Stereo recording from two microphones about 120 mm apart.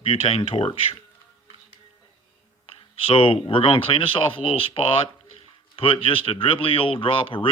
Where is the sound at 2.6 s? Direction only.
55° left (ahead or behind).